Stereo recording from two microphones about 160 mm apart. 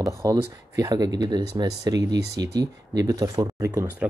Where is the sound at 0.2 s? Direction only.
20° right (ahead or behind).